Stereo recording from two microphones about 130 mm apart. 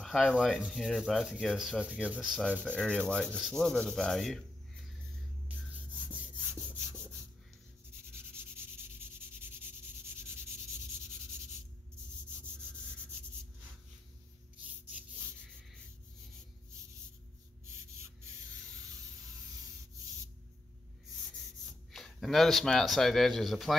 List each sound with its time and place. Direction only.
0.0 s rub: centre (ahead or behind)
2.6 s rub: 5° left (ahead or behind)
8.1 s rub: 20° right (ahead or behind)
21.9 s speech: centre (ahead or behind)